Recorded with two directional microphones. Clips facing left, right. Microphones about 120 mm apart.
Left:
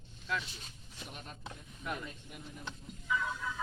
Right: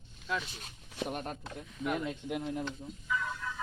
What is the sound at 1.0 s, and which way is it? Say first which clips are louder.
Speech: right 12 dB; 55° right (ahead or behind).